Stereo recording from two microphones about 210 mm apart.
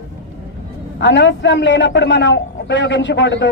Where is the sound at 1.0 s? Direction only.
60° left (ahead or behind).